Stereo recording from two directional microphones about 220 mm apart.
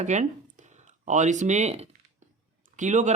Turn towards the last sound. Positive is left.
turn(degrees=-35)  # may be behind; listen again after turning